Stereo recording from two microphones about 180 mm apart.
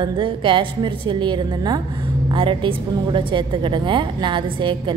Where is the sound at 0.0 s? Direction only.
30° right (ahead or behind).